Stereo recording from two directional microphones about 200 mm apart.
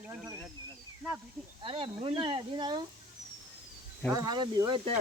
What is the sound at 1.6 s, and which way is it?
Speech, 25° right (ahead or behind).